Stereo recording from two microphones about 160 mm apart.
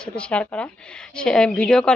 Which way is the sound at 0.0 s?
5° left (ahead or behind).